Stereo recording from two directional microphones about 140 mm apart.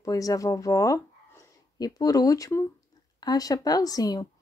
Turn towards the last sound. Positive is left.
turn(degrees=25)  # may be behind; listen again after turning